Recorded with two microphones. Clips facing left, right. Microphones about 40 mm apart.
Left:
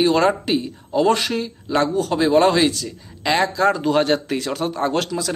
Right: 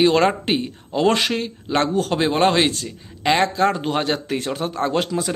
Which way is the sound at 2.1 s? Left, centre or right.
Right.